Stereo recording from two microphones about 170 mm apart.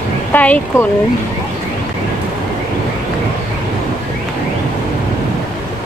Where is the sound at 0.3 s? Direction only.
10° left (ahead or behind).